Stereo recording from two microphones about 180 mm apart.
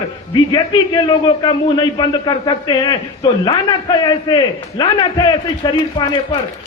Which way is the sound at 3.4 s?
25° left (ahead or behind).